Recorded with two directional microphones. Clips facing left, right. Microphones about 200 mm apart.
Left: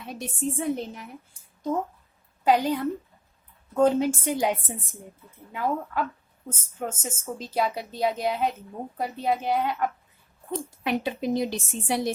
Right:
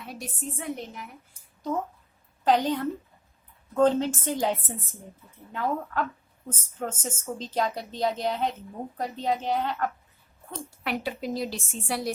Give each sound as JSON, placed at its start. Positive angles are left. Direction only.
{"t": 0.0, "sound": "a woman's voice", "side_deg": 25}
{"t": 2.4, "sound": "a woman's voice", "side_deg": 10}